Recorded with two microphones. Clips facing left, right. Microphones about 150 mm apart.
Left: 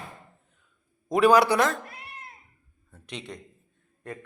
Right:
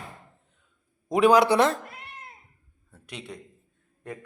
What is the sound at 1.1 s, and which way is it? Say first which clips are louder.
Speech: right 1 dB; 20° right (ahead or behind).